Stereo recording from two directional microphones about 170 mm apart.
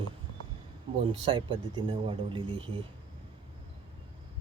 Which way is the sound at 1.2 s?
30° right (ahead or behind).